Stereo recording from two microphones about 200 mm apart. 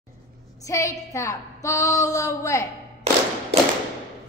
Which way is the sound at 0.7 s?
15° left (ahead or behind).